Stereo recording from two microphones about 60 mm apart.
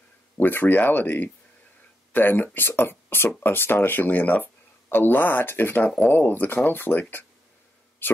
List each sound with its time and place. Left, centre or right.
0.4 s speech: left